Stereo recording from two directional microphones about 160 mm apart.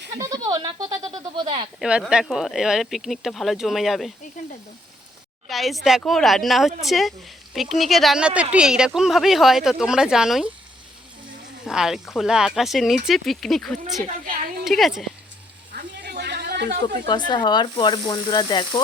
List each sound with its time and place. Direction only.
0.2 s speech: 20° right (ahead or behind)
1.8 s speech: 5° right (ahead or behind)
4.4 s sizzle: 55° left (ahead or behind)
5.5 s speech: centre (ahead or behind)
11.6 s speech: 5° right (ahead or behind)
14.6 s a sound: centre (ahead or behind)
15.7 s a sound: 85° right
16.8 s speech: 30° left (ahead or behind)